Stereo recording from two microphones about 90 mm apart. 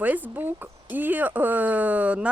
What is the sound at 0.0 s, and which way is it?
Speech, 20° right (ahead or behind).